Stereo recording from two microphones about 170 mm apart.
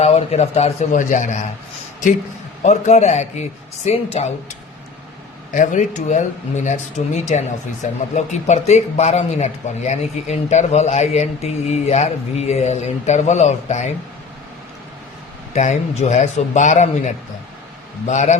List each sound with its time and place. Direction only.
0.0 s a man's voice: 35° left (ahead or behind)
2.6 s a man's voice: 40° left (ahead or behind)
5.5 s a man's voice: 45° left (ahead or behind)
15.5 s speech: 45° left (ahead or behind)